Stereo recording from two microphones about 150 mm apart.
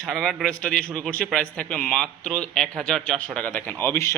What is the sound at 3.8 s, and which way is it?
Speech, 20° left (ahead or behind).